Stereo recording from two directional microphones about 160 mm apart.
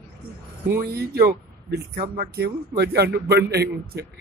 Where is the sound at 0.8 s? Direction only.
75° right (ahead or behind).